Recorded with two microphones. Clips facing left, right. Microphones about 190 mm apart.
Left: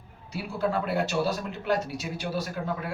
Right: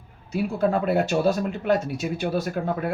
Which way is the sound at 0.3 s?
50° right (ahead or behind).